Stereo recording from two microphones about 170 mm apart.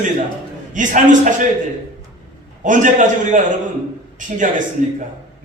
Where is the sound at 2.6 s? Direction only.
50° right (ahead or behind).